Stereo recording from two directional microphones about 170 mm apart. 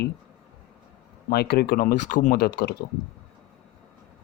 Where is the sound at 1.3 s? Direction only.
65° left (ahead or behind).